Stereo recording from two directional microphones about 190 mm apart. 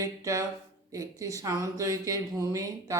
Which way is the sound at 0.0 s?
15° right (ahead or behind).